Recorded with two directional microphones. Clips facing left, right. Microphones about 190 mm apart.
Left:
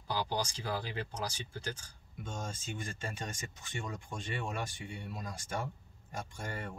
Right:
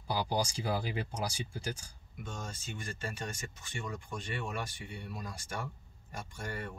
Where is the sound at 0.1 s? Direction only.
10° right (ahead or behind).